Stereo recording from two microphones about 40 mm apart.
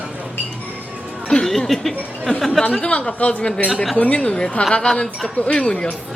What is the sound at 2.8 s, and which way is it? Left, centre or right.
Speech, left.